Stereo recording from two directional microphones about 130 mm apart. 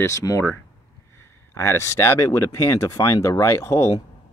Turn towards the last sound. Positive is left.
turn(degrees=20)  # may be behind; listen again after turning